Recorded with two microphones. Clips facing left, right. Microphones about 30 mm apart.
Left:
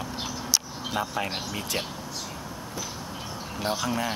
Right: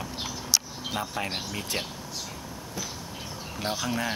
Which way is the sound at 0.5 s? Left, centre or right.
Centre.